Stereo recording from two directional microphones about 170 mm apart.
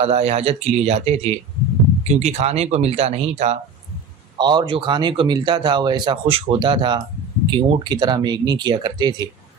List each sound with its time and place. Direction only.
0.0 s speech: 40° right (ahead or behind)
4.4 s speech: 25° right (ahead or behind)